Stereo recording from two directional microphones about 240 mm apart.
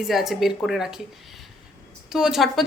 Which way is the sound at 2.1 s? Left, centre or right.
Centre.